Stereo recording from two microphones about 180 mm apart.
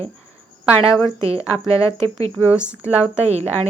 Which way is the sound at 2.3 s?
5° right (ahead or behind).